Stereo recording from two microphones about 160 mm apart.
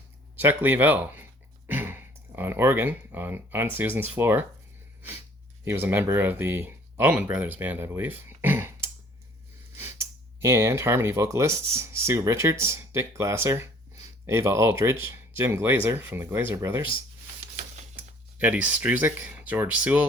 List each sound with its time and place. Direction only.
0.3 s speech: 10° right (ahead or behind)
5.6 s speech: 15° right (ahead or behind)
17.4 s a sound: 50° right (ahead or behind)
18.3 s speech: 10° right (ahead or behind)